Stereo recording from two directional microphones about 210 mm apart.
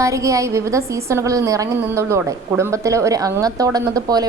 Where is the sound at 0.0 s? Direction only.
15° right (ahead or behind).